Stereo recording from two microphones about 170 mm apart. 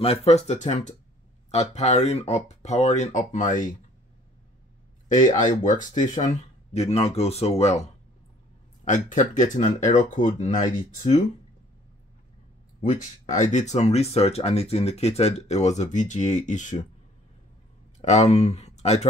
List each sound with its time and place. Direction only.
0.0 s speech: 35° left (ahead or behind)
5.0 s a sound: 50° left (ahead or behind)
5.6 s speech: 50° left (ahead or behind)
8.8 s speech: 45° left (ahead or behind)
13.3 s speech: 45° left (ahead or behind)
18.0 s speech: 40° left (ahead or behind)